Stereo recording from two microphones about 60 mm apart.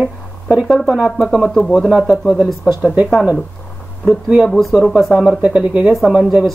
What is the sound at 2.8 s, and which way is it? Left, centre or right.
Speech, right.